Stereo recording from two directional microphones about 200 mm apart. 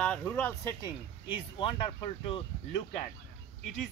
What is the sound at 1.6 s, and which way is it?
Speech, 30° left (ahead or behind).